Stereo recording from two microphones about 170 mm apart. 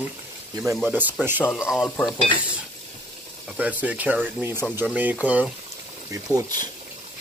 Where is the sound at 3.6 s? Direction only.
10° right (ahead or behind).